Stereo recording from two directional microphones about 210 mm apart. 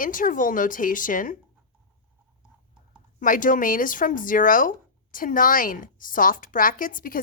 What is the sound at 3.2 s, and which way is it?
A woman's voice, 40° left (ahead or behind).